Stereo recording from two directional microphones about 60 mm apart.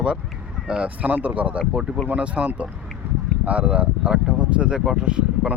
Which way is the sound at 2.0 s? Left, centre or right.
Right.